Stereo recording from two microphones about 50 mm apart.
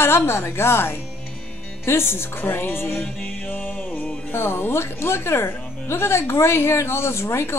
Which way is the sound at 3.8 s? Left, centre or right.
Left.